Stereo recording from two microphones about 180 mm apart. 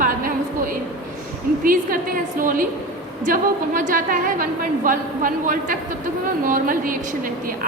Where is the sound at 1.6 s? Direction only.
50° right (ahead or behind).